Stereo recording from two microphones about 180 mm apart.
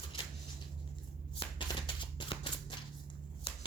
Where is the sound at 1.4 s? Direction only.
30° left (ahead or behind).